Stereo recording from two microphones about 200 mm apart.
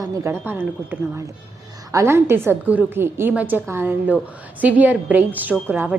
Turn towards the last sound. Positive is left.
turn(degrees=-5)  # may be behind; listen again after turning